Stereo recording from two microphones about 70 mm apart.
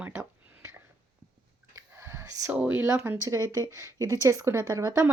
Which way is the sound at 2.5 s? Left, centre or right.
Centre.